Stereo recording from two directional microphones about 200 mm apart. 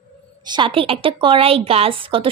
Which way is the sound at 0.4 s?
25° right (ahead or behind).